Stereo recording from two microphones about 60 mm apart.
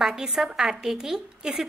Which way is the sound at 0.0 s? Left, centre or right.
Centre.